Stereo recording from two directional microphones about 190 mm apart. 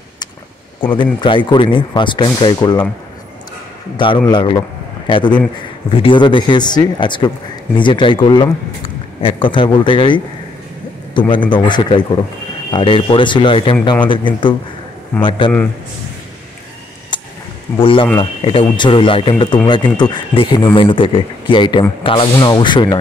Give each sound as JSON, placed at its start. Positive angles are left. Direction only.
{"t": 0.9, "sound": "speech", "side_deg": 25}
{"t": 3.9, "sound": "a man's voice", "side_deg": 25}
{"t": 17.1, "sound": "a sound", "side_deg": 25}
{"t": 17.7, "sound": "speech", "side_deg": 30}